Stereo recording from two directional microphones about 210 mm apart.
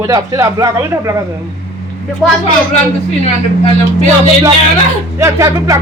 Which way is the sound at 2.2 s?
Centre (ahead or behind).